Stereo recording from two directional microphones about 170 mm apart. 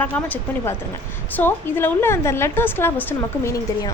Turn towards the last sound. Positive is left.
turn(degrees=20)  # may be behind; listen again after turning